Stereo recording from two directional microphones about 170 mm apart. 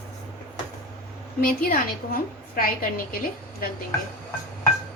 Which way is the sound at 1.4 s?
55° left (ahead or behind).